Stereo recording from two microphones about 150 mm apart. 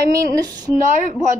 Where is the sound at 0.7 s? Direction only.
50° left (ahead or behind).